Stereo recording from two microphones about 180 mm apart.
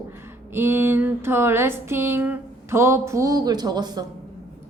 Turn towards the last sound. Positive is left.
turn(degrees=-20)  # may be behind; listen again after turning